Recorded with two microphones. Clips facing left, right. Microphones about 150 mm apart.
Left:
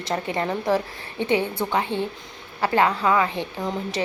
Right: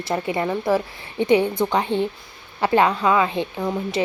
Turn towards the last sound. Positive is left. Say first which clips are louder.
# right 3 dB
turn(degrees=-5)  # may be behind; listen again after turning